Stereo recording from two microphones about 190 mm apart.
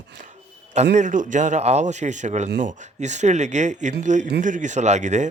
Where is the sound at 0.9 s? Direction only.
40° right (ahead or behind).